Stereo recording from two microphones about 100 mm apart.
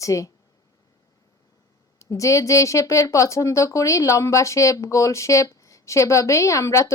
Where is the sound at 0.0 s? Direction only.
35° left (ahead or behind).